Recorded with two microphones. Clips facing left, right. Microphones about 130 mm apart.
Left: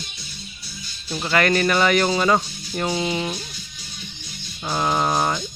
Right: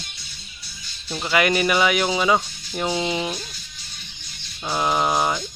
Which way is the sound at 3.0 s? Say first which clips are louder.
Even; 15° right (ahead or behind).